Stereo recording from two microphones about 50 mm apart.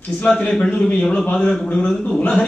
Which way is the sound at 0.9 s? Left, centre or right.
Left.